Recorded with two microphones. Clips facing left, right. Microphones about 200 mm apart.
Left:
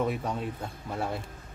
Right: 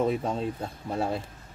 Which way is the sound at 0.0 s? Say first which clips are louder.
Right 3 dB; 25° right (ahead or behind).